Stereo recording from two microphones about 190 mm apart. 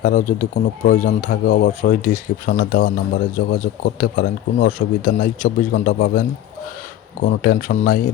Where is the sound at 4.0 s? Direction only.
45° left (ahead or behind).